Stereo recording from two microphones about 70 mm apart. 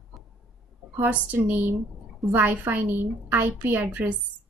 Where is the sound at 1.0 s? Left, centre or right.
Right.